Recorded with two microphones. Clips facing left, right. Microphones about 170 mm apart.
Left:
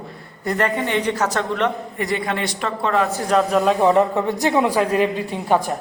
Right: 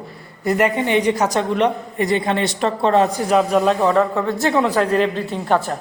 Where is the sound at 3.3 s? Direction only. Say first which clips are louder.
Right 1 dB; 5° right (ahead or behind).